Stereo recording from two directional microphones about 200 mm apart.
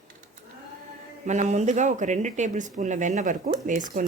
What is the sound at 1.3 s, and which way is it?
Speech, 35° right (ahead or behind).